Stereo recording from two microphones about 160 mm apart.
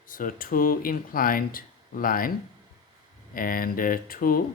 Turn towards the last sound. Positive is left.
turn(degrees=65)  # may be behind; listen again after turning